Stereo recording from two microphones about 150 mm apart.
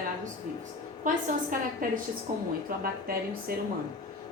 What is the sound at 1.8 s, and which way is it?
Speech, 65° right (ahead or behind).